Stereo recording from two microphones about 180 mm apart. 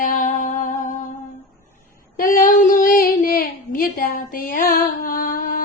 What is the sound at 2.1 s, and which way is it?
Female singing, 50° left (ahead or behind).